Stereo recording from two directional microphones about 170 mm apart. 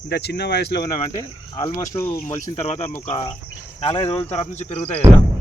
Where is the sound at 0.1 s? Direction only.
80° left; by 1.0 s 55° left (ahead or behind).